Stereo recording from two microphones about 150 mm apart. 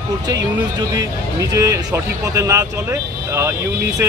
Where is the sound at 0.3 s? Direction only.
25° right (ahead or behind).